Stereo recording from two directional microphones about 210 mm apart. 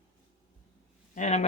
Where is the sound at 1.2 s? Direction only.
35° left (ahead or behind).